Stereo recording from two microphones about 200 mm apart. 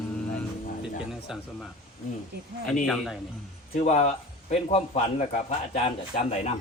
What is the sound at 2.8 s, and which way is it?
Speech, centre (ahead or behind).